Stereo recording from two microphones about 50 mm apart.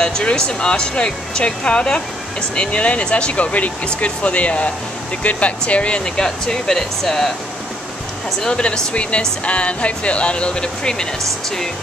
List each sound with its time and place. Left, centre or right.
0.0 s speech: centre
8.4 s speech: centre